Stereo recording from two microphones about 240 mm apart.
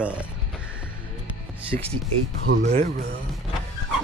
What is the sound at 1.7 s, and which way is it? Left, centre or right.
Speech, right.